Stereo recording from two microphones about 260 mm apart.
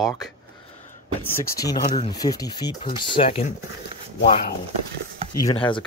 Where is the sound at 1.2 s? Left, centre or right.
Centre.